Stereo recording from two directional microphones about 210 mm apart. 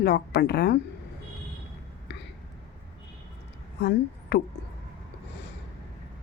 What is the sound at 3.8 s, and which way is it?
Speech, 55° left (ahead or behind).